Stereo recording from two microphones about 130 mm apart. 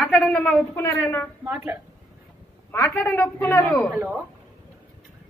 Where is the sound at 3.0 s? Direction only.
20° left (ahead or behind).